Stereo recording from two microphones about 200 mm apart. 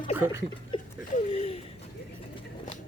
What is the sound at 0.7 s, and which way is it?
Chuckle, 25° left (ahead or behind).